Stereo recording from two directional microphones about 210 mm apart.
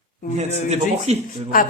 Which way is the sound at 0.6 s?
30° right (ahead or behind).